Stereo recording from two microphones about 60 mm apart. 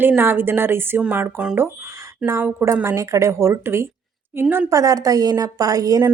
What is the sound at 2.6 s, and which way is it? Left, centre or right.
A woman's voice, right.